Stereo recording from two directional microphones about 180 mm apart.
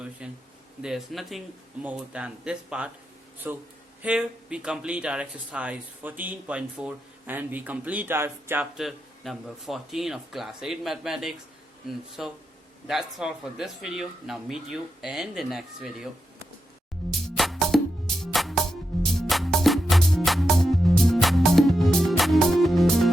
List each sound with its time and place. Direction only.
0.2 s speech: 5° right (ahead or behind)
17.1 s music: centre (ahead or behind)